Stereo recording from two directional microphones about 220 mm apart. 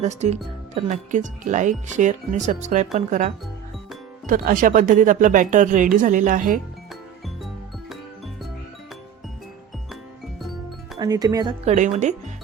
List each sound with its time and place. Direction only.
0.0 s speech: 30° right (ahead or behind)
10.9 s speech: 15° right (ahead or behind)
11.6 s speech: 30° right (ahead or behind)